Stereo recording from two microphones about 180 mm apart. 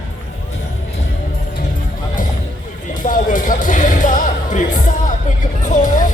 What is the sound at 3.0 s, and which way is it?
Music, 45° left (ahead or behind).